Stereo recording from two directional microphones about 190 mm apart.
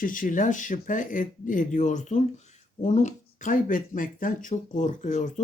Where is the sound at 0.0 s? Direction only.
45° left (ahead or behind).